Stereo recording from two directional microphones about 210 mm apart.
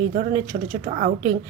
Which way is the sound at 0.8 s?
35° right (ahead or behind).